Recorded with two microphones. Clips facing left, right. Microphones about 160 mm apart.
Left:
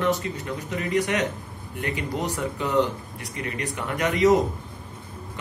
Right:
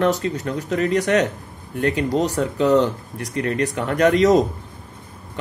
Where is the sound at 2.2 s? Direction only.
85° right.